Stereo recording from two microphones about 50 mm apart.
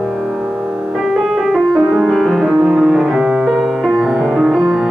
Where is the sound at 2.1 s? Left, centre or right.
Centre.